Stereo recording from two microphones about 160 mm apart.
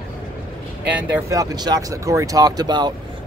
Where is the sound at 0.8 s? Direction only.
10° right (ahead or behind).